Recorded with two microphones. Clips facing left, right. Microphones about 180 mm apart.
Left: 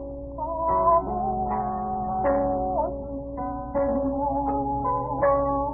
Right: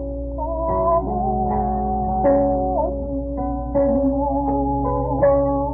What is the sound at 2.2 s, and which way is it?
Music, 30° right (ahead or behind).